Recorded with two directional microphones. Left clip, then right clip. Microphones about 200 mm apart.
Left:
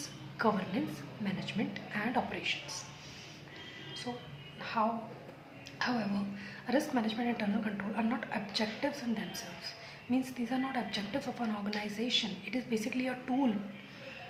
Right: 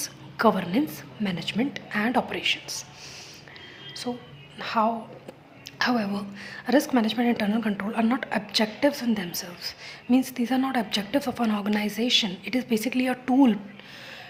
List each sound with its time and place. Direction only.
0.0 s a sound: 50° right (ahead or behind)
1.2 s a woman's voice: 50° right (ahead or behind)
4.5 s a woman's voice: 50° right (ahead or behind)